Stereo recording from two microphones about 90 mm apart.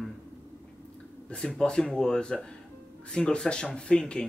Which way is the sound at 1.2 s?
10° left (ahead or behind).